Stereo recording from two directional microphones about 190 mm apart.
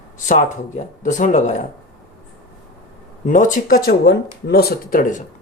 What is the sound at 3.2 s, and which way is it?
Speech, 45° left (ahead or behind).